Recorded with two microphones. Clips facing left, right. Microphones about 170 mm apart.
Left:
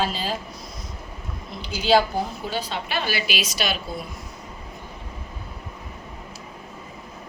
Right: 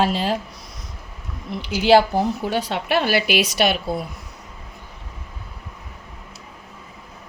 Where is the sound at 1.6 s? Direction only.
75° right (ahead or behind).